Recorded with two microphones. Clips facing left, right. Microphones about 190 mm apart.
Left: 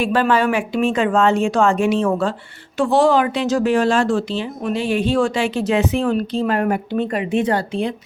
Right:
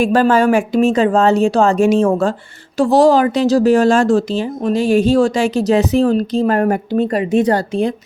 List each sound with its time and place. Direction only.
0.0 s speech: 45° right (ahead or behind)